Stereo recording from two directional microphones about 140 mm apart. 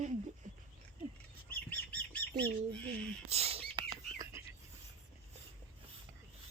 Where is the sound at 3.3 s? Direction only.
45° right (ahead or behind).